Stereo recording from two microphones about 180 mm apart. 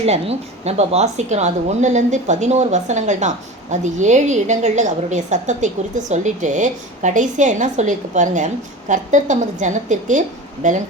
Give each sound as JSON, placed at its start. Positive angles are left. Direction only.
{"t": 0.0, "sound": "a woman's voice", "side_deg": -35}